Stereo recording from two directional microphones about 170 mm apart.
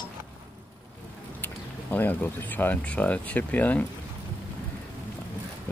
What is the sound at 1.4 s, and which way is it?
Speech, 10° left (ahead or behind).